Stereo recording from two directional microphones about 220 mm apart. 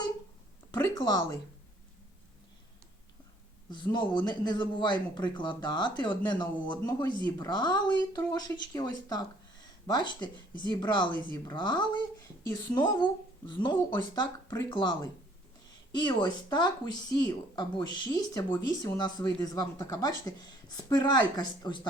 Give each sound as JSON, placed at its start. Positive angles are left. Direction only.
{"t": 0.7, "sound": "speech", "side_deg": 20}
{"t": 3.7, "sound": "speech", "side_deg": 20}